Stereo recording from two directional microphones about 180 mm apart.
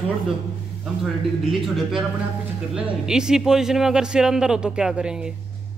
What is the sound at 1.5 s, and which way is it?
Speech, centre (ahead or behind).